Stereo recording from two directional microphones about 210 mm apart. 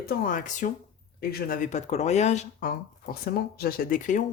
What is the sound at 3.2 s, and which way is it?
Speech, 45° left (ahead or behind).